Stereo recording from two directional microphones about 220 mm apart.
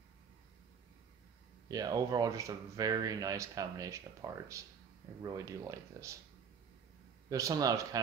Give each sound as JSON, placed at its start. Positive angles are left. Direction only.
{"t": 1.7, "sound": "speech", "side_deg": -15}
{"t": 7.2, "sound": "speech", "side_deg": -15}